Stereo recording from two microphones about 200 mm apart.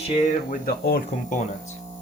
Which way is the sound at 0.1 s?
35° left (ahead or behind).